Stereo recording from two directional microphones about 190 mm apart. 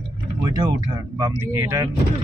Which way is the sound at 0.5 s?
20° right (ahead or behind).